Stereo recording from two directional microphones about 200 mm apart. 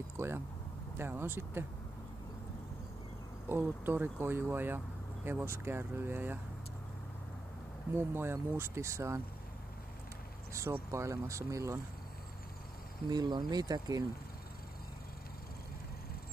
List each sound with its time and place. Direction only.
0.2 s speech: 15° right (ahead or behind)
3.4 s speech: 10° right (ahead or behind)
7.9 s speech: 10° right (ahead or behind)
10.5 s speech: 15° right (ahead or behind)
13.1 s speech: 20° right (ahead or behind)